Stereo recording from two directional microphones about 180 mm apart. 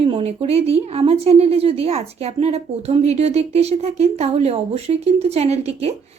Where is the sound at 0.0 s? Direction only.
35° right (ahead or behind).